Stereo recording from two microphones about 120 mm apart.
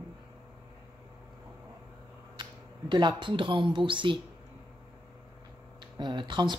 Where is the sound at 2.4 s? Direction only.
40° right (ahead or behind).